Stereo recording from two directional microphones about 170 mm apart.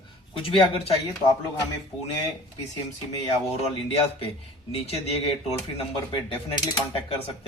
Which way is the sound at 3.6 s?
35° left (ahead or behind).